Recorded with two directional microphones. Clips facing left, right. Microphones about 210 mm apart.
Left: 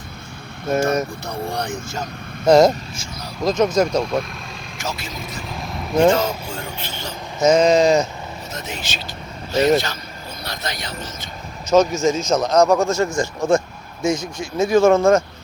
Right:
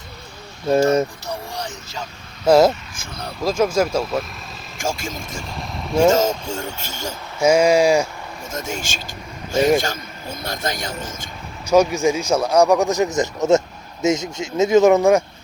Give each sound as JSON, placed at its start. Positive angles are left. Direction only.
{"t": 1.2, "sound": "speech", "side_deg": 55}
{"t": 2.4, "sound": "speech", "side_deg": -5}
{"t": 2.9, "sound": "speech", "side_deg": -55}
{"t": 3.4, "sound": "speech", "side_deg": -5}
{"t": 4.8, "sound": "speech", "side_deg": -50}
{"t": 7.3, "sound": "a man's voice", "side_deg": -10}
{"t": 8.5, "sound": "speech", "side_deg": -45}
{"t": 11.7, "sound": "a man's voice", "side_deg": -15}